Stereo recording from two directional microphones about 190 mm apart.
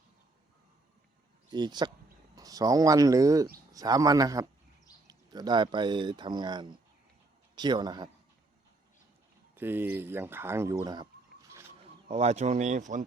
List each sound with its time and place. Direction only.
1.5 s speech: 20° right (ahead or behind)
9.6 s speech: 10° right (ahead or behind)
12.0 s speech: 35° right (ahead or behind)